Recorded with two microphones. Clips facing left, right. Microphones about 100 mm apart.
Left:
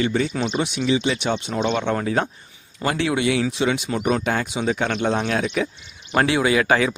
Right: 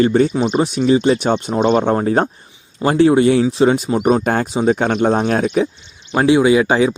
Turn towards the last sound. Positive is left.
turn(degrees=-20)  # may be behind; listen again after turning